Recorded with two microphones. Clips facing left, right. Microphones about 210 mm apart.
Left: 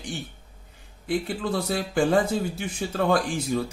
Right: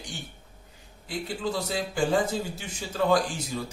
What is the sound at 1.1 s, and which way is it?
Speech, 55° left (ahead or behind).